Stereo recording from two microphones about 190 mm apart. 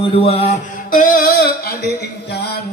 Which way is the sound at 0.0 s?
30° left (ahead or behind).